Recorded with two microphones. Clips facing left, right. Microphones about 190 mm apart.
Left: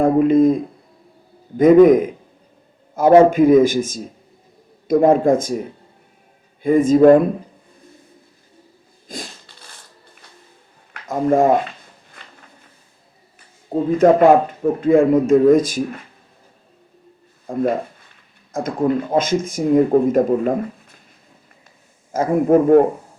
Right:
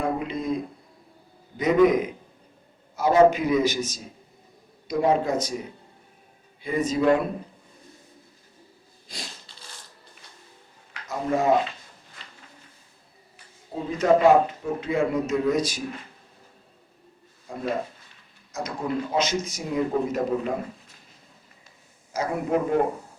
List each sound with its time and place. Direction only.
0.0 s speech: 50° left (ahead or behind)
6.6 s speech: 50° left (ahead or behind)
9.1 s speech: 50° left (ahead or behind)
11.0 s speech: 50° left (ahead or behind)
13.9 s speech: 50° left (ahead or behind)
17.5 s speech: 50° left (ahead or behind)
22.1 s speech: 50° left (ahead or behind)